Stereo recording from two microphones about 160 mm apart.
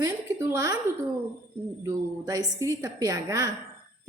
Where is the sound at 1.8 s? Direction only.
20° right (ahead or behind).